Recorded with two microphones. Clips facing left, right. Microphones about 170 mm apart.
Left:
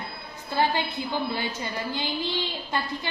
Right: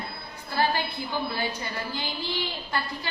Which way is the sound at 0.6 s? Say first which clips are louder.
Left 1 dB; 20° left (ahead or behind).